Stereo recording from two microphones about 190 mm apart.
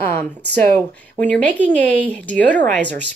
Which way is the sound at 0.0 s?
10° left (ahead or behind).